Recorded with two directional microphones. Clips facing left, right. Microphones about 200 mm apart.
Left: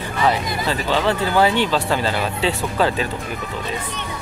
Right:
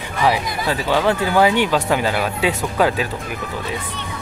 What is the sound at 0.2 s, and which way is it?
Speech, 15° right (ahead or behind).